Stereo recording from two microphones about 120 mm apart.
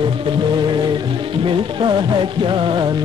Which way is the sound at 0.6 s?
40° right (ahead or behind).